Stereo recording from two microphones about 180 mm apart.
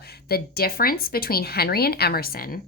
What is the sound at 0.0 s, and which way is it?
A woman's voice, 60° left (ahead or behind).